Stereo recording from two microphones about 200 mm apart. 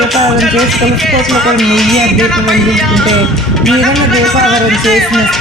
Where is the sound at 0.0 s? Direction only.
Centre (ahead or behind).